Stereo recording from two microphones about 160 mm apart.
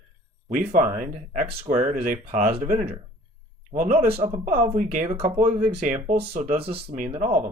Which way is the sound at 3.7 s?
50° right (ahead or behind).